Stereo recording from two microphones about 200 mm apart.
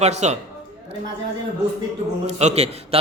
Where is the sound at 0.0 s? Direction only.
35° right (ahead or behind).